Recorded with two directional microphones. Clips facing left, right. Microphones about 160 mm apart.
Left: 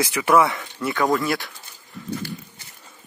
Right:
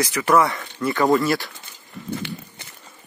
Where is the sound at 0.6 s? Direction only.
Centre (ahead or behind).